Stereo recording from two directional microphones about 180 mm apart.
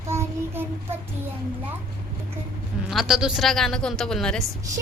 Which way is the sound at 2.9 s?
Centre (ahead or behind).